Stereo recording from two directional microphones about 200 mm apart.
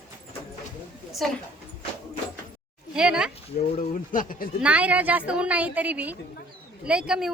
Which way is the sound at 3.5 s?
35° left (ahead or behind).